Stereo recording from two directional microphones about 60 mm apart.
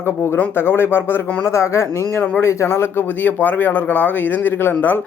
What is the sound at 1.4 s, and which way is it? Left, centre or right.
Speech, left.